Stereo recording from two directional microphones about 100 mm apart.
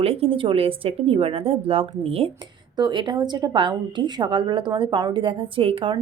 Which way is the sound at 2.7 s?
45° right (ahead or behind).